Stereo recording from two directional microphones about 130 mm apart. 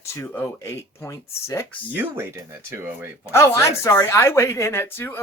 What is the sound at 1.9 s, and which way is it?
Speech, 15° right (ahead or behind).